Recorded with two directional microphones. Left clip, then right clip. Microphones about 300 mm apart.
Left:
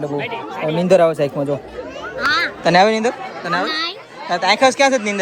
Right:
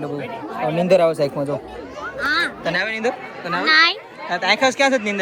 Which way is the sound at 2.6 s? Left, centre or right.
Centre.